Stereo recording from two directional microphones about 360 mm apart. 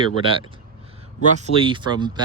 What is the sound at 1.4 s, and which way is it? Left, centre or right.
Speech, centre.